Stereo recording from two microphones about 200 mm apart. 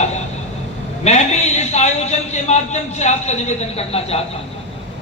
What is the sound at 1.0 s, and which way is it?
A man's voice, 30° left (ahead or behind).